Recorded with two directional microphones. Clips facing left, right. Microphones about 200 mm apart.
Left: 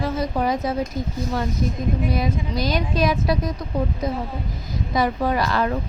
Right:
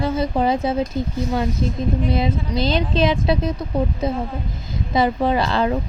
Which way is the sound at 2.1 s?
25° right (ahead or behind).